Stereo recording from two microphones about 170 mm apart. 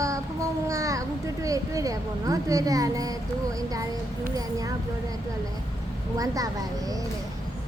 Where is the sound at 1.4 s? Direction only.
20° right (ahead or behind).